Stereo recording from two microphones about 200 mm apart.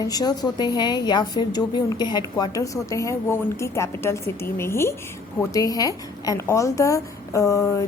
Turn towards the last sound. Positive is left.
turn(degrees=15)  # may be behind; listen again after turning